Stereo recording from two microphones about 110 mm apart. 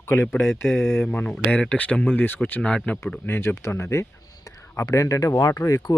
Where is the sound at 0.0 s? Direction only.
25° left (ahead or behind).